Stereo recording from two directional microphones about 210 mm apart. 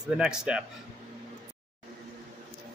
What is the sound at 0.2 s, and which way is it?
Speech, 5° right (ahead or behind).